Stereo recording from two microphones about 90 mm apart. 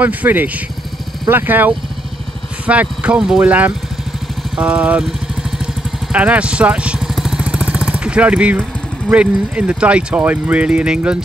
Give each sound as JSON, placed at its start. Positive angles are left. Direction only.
{"t": 0.0, "sound": "speech", "side_deg": -20}
{"t": 6.1, "sound": "vehicle", "side_deg": -15}
{"t": 9.1, "sound": "speech", "side_deg": -15}